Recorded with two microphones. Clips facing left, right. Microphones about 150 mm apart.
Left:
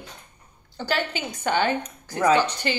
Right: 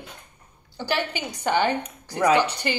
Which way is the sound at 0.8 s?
15° right (ahead or behind).